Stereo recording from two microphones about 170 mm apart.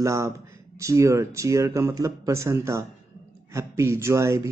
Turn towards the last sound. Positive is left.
turn(degrees=-15)  # may be behind; listen again after turning